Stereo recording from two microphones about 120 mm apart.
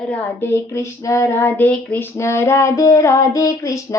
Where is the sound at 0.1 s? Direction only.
20° left (ahead or behind).